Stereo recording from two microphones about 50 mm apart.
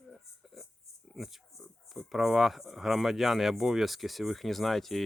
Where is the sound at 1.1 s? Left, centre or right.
Centre.